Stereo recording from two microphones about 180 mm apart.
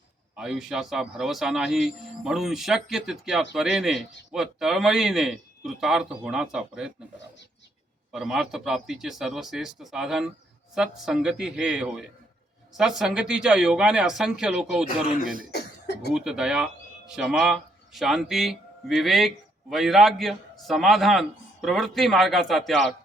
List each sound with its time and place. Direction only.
0.3 s a man's voice: centre (ahead or behind)
8.1 s a man's voice: centre (ahead or behind)
15.2 s speech: 50° right (ahead or behind)
15.5 s cough: 65° left (ahead or behind)
16.1 s a man's voice: 5° right (ahead or behind)